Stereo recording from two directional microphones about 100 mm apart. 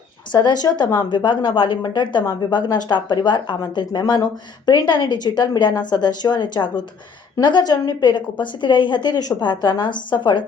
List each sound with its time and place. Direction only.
0.3 s a woman's voice: 50° left (ahead or behind)